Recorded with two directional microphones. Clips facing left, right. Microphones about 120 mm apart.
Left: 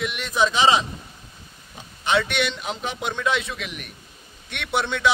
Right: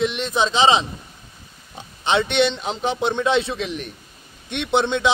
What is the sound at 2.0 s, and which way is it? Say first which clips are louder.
A man's voice: right 4 dB; 25° right (ahead or behind).